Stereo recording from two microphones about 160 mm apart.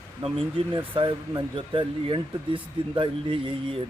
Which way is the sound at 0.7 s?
25° right (ahead or behind).